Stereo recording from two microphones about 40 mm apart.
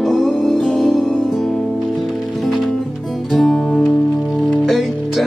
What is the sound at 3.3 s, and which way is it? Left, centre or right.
Music, centre.